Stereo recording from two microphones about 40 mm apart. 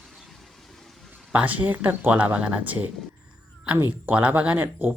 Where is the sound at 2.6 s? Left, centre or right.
Right.